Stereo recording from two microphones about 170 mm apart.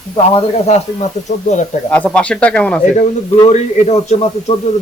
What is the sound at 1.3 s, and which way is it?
Speech, 45° left (ahead or behind).